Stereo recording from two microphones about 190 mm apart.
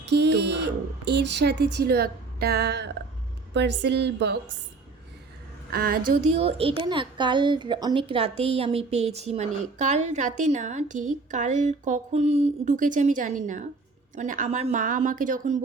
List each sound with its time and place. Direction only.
0.1 s speech: 65° right (ahead or behind)
5.7 s a woman's voice: 50° right (ahead or behind)
6.3 s a woman's voice: 30° right (ahead or behind)